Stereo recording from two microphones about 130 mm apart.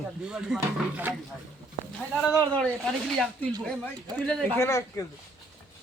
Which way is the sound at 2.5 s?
5° left (ahead or behind).